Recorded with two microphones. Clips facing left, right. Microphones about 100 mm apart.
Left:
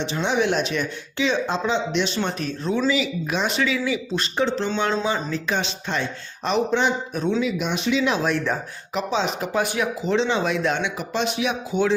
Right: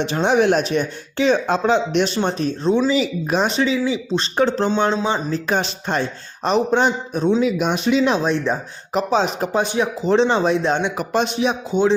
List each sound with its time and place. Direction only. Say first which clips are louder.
0.0 s speech: right 6 dB; 50° right (ahead or behind)
2.1 s speech: right 5 dB; 35° right (ahead or behind)
4.4 s speech: right 5 dB; 45° right (ahead or behind)
5.0 s speech: right 3 dB; 30° right (ahead or behind)
5.5 s speech: right 5 dB; 45° right (ahead or behind)
7.4 s speech: right 5 dB; 50° right (ahead or behind)
8.1 s speech: right 3 dB; 20° right (ahead or behind)
9.0 s speech: right 5 dB; 40° right (ahead or behind)
9.6 s speech: right 3 dB; 30° right (ahead or behind)
10.9 s speech: right 5 dB; 45° right (ahead or behind)
11.3 s speech: right 4 dB; 30° right (ahead or behind)